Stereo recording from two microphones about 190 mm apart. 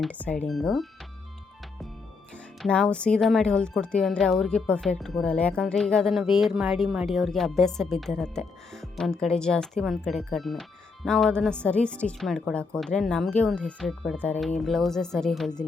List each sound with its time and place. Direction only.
0.0 s speech: 5° left (ahead or behind)
2.3 s speech: 5° left (ahead or behind)